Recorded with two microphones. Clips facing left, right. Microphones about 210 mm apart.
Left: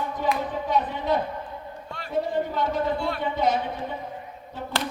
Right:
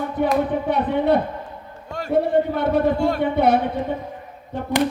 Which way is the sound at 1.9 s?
50° right (ahead or behind).